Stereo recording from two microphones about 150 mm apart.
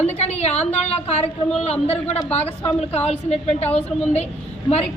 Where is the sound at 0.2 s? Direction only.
45° left (ahead or behind).